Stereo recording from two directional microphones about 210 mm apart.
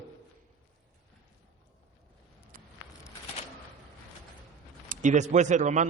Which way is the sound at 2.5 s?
40° right (ahead or behind).